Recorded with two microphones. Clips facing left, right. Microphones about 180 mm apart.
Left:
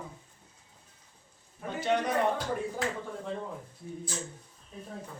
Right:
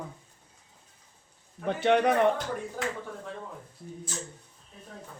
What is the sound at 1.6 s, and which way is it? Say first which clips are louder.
Speech: right 6 dB; 65° right (ahead or behind).